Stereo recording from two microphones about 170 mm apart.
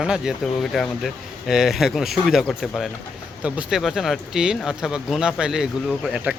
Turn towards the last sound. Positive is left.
turn(degrees=-5)  # may be behind; listen again after turning